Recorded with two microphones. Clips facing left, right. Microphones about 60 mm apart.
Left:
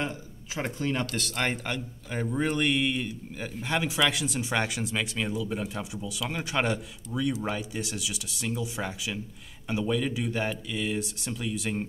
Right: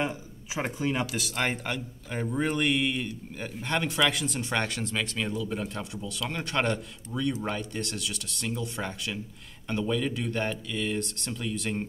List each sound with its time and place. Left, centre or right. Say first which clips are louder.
0.0 s speech: right 2 dB; centre